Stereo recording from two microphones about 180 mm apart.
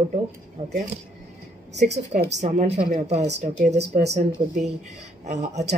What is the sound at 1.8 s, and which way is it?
A woman's voice, 40° right (ahead or behind).